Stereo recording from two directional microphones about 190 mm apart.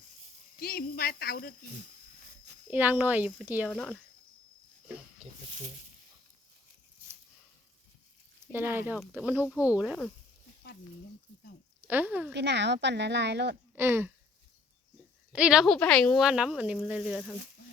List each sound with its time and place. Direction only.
0.6 s speech: 50° left (ahead or behind)
2.6 s speech: 10° right (ahead or behind)
3.7 s speech: 5° left (ahead or behind)
8.5 s speech: 10° right (ahead or behind)
11.9 s speech: 10° right (ahead or behind)
12.3 s speech: 65° right (ahead or behind)
13.7 s speech: 10° right (ahead or behind)
15.3 s speech: 5° right (ahead or behind)